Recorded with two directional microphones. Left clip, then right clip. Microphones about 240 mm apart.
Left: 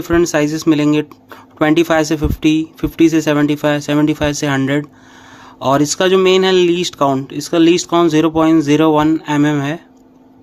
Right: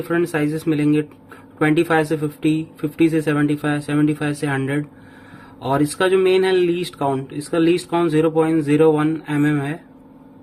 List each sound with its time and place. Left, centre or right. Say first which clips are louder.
0.1 s speech: left 7 dB; left